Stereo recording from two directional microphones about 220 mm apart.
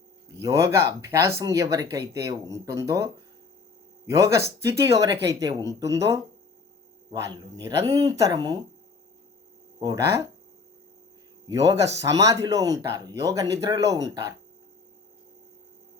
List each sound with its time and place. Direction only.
0.4 s speech: 15° right (ahead or behind)
9.8 s speech: 15° right (ahead or behind)
11.4 s speech: 15° right (ahead or behind)